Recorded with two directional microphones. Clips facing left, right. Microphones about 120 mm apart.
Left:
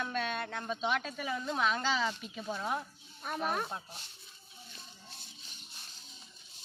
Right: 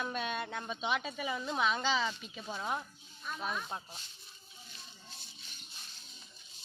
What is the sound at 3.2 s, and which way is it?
Speech, 60° left (ahead or behind).